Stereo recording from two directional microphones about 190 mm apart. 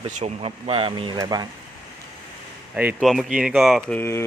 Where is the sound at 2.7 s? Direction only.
5° right (ahead or behind); by 4.2 s 10° left (ahead or behind).